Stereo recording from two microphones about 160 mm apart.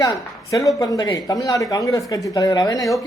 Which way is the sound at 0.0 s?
20° left (ahead or behind).